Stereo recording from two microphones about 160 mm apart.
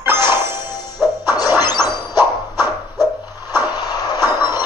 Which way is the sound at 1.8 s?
25° left (ahead or behind).